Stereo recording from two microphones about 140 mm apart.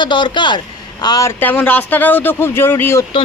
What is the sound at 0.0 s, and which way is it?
A man's voice, 35° left (ahead or behind).